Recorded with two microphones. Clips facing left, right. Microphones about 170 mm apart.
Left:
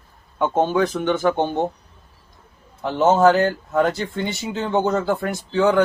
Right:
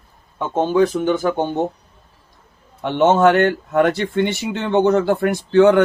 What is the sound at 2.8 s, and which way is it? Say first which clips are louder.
Speech: right 1 dB; 75° right (ahead or behind).